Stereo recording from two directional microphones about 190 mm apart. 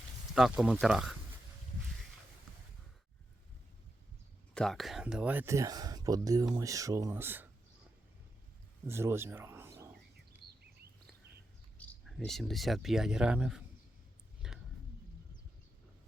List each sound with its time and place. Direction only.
0.3 s speech: 5° right (ahead or behind)
4.5 s speech: centre (ahead or behind)
8.9 s speech: 15° right (ahead or behind)
11.8 s speech: 5° left (ahead or behind)
14.4 s a sound: 5° right (ahead or behind)